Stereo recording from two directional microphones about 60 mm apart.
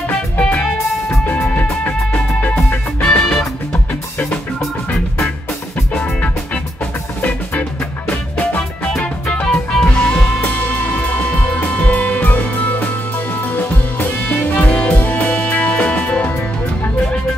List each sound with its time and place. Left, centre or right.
0.1 s music: left
3.0 s music: centre
5.9 s music: left
11.5 s music: left